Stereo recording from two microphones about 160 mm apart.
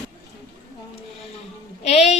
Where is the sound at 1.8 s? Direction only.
45° left (ahead or behind).